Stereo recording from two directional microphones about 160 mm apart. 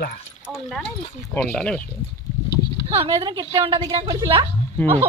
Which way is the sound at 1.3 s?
10° left (ahead or behind).